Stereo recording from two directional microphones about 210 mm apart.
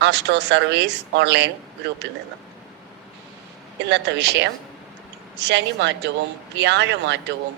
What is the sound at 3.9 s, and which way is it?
Speech, 55° right (ahead or behind).